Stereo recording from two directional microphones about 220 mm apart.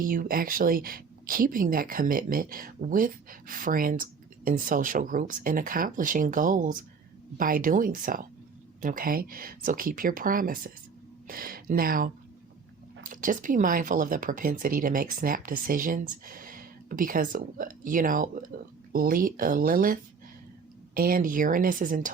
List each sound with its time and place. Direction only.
0.0 s speech: 40° right (ahead or behind)